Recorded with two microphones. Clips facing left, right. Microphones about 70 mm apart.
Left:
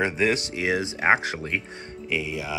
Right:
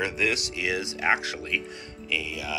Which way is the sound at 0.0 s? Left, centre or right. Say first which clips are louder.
Left 4 dB; left.